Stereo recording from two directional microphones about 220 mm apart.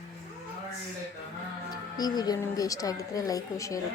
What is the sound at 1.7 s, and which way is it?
A woman's voice, 20° left (ahead or behind).